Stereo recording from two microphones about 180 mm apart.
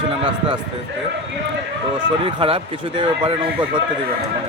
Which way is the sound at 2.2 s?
30° right (ahead or behind).